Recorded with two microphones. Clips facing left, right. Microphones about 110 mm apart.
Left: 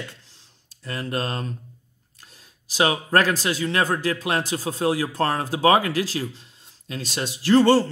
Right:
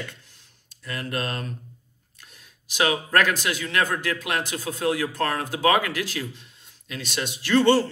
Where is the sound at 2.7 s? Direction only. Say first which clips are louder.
Left 2 dB; 35° left (ahead or behind).